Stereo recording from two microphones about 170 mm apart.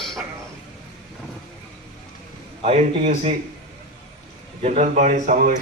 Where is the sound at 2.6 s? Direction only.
40° right (ahead or behind).